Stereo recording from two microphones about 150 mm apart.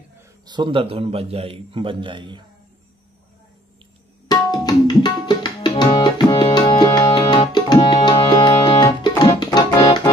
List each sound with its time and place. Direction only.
0.5 s a man's voice: 35° right (ahead or behind)
4.6 s tabla: 30° left (ahead or behind)
9.4 s music: 25° left (ahead or behind)